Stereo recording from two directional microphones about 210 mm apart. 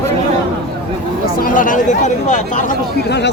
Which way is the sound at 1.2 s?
40° left (ahead or behind).